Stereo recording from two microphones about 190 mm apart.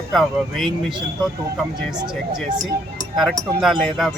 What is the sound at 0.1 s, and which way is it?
Speech, centre (ahead or behind).